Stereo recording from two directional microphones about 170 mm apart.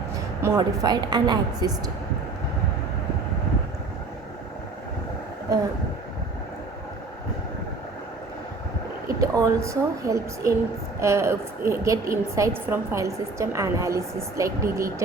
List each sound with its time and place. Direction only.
0.4 s speech: 20° right (ahead or behind)
9.0 s a woman's voice: 20° right (ahead or behind)